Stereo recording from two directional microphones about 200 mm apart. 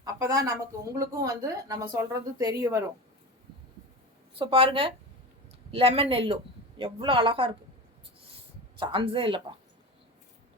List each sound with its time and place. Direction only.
0.0 s a woman's voice: 20° right (ahead or behind)
4.4 s speech: 25° right (ahead or behind)
8.8 s speech: 25° right (ahead or behind)